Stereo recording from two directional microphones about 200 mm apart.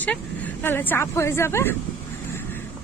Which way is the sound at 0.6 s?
10° left (ahead or behind).